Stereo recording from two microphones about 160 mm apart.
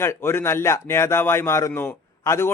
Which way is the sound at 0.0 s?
15° left (ahead or behind).